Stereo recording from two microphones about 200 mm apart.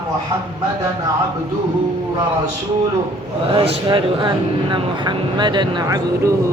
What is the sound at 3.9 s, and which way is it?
Speech, 25° right (ahead or behind).